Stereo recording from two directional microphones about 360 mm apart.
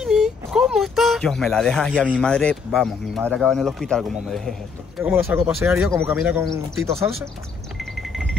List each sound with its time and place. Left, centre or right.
0.0 s speech: centre